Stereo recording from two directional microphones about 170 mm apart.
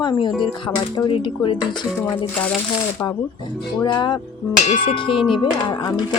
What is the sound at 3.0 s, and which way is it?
Speech, 15° left (ahead or behind).